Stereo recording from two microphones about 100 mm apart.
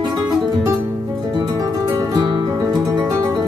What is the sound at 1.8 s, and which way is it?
Music, 40° right (ahead or behind).